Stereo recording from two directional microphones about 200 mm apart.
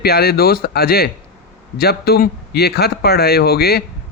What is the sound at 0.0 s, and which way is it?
Speech, 50° left (ahead or behind).